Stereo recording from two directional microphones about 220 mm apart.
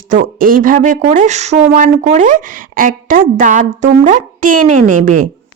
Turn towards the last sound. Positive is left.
turn(degrees=-35)  # may be behind; listen again after turning